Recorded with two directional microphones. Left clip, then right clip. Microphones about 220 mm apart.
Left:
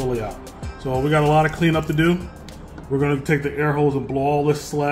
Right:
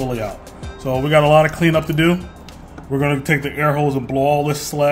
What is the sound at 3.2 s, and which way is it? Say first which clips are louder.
Speech: right 3 dB; 40° right (ahead or behind).